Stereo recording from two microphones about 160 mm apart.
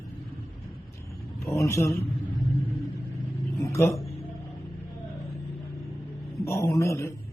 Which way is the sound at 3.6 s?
20° left (ahead or behind).